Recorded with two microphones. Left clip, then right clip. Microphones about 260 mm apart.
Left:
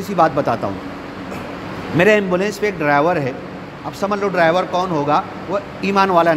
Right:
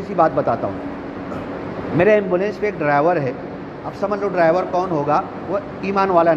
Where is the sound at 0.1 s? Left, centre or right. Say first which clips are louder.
Left 1 dB; left.